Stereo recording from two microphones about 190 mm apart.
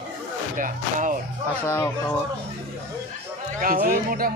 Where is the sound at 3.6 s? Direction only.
45° right (ahead or behind).